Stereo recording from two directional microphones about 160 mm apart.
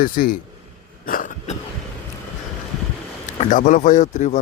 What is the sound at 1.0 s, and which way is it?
Cough, 60° left (ahead or behind).